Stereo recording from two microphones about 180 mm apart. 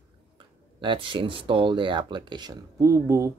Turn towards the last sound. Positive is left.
turn(degrees=-15)  # may be behind; listen again after turning